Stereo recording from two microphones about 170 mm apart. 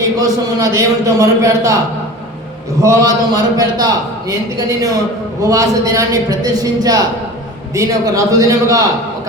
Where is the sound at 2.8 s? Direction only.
20° right (ahead or behind).